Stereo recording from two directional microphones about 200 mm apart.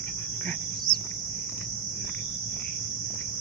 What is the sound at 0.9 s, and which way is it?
Cricket, 45° left (ahead or behind).